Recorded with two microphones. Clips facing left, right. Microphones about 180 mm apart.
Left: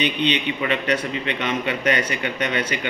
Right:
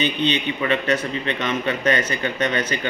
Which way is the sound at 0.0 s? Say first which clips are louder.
Even; 15° left (ahead or behind).